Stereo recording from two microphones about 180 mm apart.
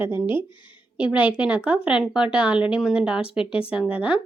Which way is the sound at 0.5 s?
25° left (ahead or behind).